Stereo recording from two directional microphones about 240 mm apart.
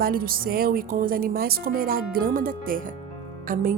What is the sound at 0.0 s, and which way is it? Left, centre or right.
Speech, right.